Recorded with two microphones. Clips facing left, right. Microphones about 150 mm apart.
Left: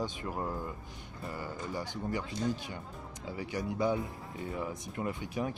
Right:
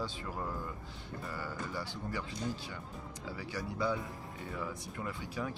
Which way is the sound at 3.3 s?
20° left (ahead or behind).